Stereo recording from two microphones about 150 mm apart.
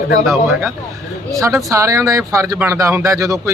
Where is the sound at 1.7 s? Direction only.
20° right (ahead or behind).